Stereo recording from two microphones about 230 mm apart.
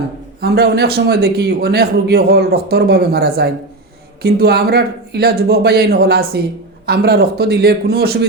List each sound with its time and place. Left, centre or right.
0.4 s a man's voice: right